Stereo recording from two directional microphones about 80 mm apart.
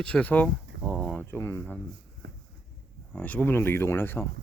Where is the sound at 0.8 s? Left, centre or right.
Centre.